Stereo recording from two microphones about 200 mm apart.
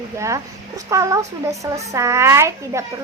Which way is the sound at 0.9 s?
15° right (ahead or behind).